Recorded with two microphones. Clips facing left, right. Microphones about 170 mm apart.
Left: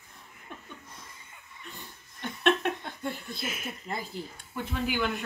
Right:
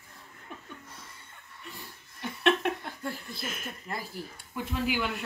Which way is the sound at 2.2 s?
Centre (ahead or behind).